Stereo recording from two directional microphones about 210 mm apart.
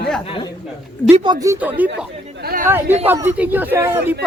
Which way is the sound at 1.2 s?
20° right (ahead or behind).